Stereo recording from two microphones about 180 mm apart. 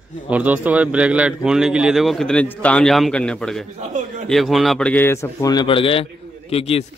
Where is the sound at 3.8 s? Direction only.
40° right (ahead or behind).